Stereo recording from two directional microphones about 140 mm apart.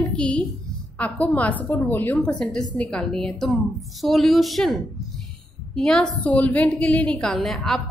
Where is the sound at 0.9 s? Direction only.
10° left (ahead or behind).